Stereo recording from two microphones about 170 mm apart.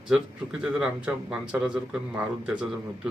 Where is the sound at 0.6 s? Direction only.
5° right (ahead or behind).